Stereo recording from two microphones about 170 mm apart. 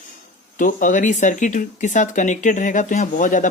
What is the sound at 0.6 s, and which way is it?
Speech, 50° left (ahead or behind).